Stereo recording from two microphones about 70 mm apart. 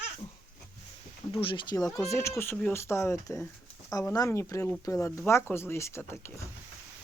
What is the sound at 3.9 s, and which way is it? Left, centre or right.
Speech, left.